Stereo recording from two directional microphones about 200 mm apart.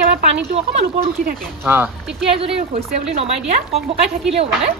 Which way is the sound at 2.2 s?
30° right (ahead or behind).